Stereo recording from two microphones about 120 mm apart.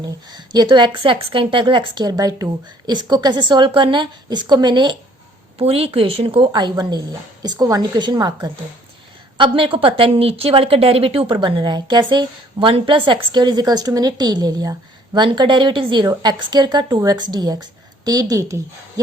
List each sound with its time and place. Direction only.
0.0 s a woman's voice: 35° right (ahead or behind)
5.5 s a woman's voice: 55° right (ahead or behind); by 8.3 s 40° right (ahead or behind)
9.4 s a woman's voice: 45° right (ahead or behind); by 18.6 s 30° right (ahead or behind)